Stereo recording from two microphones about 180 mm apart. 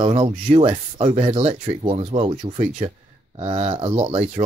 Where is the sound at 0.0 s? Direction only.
30° right (ahead or behind).